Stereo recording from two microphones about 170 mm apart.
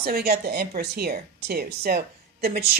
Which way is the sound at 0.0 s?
65° right (ahead or behind).